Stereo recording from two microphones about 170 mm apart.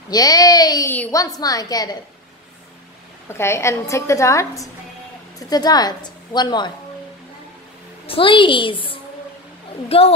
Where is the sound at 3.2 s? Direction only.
15° left (ahead or behind).